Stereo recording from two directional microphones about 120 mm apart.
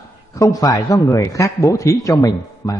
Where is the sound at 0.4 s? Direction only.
30° left (ahead or behind).